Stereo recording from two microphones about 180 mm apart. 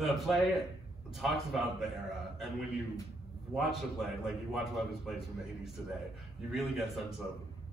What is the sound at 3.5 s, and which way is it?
A man's voice, centre (ahead or behind).